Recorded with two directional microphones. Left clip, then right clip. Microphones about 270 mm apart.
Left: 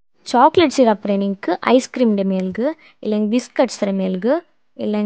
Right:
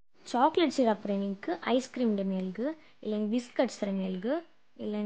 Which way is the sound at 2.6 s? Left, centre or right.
Centre.